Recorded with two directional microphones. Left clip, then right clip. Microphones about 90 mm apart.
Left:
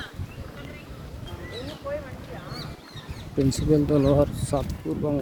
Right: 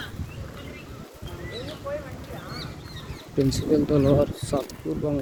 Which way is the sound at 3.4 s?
45° left (ahead or behind).